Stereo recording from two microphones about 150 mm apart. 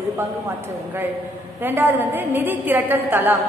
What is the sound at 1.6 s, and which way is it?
A woman's voice, 15° right (ahead or behind).